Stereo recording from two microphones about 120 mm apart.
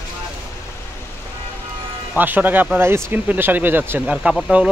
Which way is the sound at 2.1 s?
15° right (ahead or behind).